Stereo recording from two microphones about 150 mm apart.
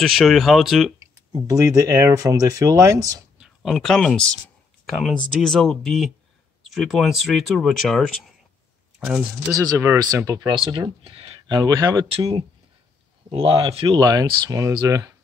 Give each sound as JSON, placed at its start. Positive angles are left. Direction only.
{"t": 0.0, "sound": "speech", "side_deg": 0}
{"t": 0.9, "sound": "speech", "side_deg": -20}
{"t": 3.3, "sound": "speech", "side_deg": 0}
{"t": 9.0, "sound": "speech", "side_deg": -15}
{"t": 10.6, "sound": "speech", "side_deg": -35}
{"t": 13.3, "sound": "speech", "side_deg": -40}
{"t": 13.8, "sound": "speech", "side_deg": -25}